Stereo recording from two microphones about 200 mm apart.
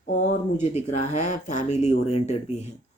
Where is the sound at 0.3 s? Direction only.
35° left (ahead or behind).